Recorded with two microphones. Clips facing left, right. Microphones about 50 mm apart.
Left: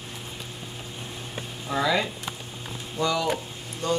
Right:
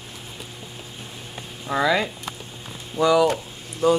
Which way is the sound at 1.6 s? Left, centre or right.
Centre.